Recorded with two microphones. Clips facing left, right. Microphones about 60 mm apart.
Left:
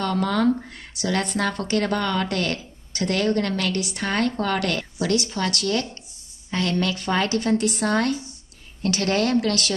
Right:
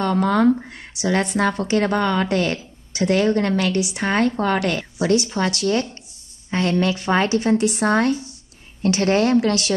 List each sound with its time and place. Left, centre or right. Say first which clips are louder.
0.0 s speech: right 4 dB; right